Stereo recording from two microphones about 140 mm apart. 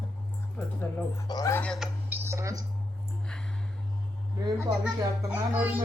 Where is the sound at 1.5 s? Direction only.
10° left (ahead or behind).